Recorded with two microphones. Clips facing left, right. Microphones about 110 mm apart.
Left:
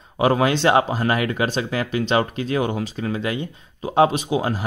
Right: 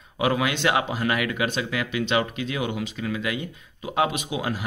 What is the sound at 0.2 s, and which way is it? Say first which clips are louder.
Speech: left 5 dB; 35° left (ahead or behind).